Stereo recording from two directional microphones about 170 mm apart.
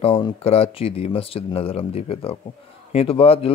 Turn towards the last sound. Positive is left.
turn(degrees=35)  # may be behind; listen again after turning